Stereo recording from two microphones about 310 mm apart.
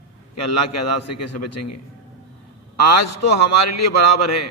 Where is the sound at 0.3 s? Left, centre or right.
Left.